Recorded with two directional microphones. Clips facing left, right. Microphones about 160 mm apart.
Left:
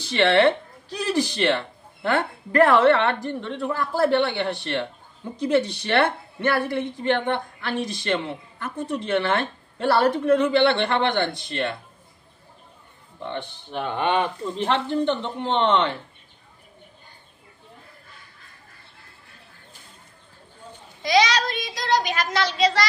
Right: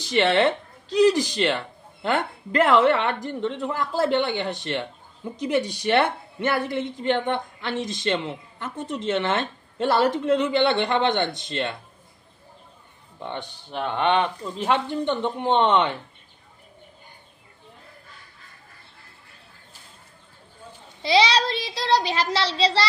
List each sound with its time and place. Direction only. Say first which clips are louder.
0.0 s speech: left 2 dB; 15° right (ahead or behind)
2.6 s a woman's voice: left 2 dB; 15° right (ahead or behind)
13.8 s speech: right 1 dB; 5° left (ahead or behind)
14.6 s a woman's voice: left 1 dB; 15° right (ahead or behind)
21.0 s a sound: even; 30° right (ahead or behind)